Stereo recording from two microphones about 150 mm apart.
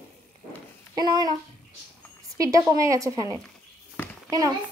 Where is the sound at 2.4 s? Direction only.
20° right (ahead or behind).